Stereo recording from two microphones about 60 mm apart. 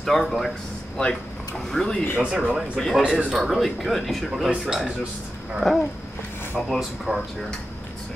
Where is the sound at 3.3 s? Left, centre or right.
Centre.